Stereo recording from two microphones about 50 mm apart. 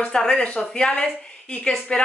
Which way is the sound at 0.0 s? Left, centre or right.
Centre.